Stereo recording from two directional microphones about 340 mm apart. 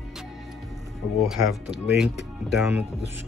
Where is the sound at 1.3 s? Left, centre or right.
Centre.